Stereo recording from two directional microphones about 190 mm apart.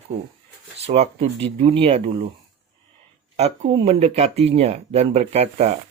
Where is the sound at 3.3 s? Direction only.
35° right (ahead or behind).